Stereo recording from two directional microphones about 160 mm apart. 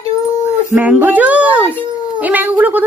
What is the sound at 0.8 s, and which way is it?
Speech, 10° right (ahead or behind).